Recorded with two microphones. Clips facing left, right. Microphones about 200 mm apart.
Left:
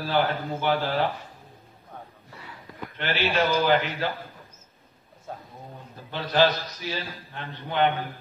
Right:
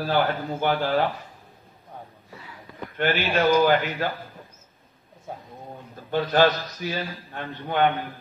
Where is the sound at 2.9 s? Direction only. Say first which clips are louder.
Right 2 dB; 50° right (ahead or behind).